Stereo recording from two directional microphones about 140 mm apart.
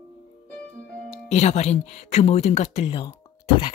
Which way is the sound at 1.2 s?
50° left (ahead or behind).